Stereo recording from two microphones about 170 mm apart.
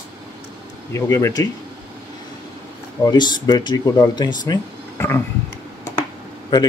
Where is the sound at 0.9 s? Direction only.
15° left (ahead or behind).